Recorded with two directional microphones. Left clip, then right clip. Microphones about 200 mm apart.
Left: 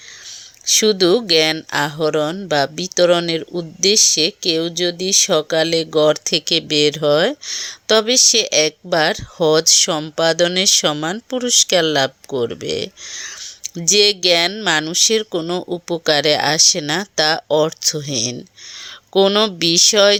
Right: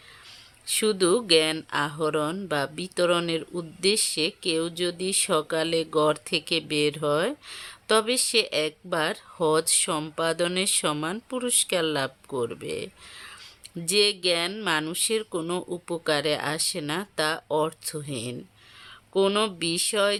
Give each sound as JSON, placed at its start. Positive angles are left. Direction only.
{"t": 0.7, "sound": "speech", "side_deg": 20}